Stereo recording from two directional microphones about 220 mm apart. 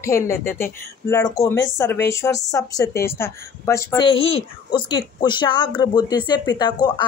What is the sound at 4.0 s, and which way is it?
A woman's voice, 25° left (ahead or behind).